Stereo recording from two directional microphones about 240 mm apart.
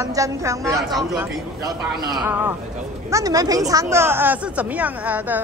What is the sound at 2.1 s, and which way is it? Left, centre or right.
A woman's voice, centre.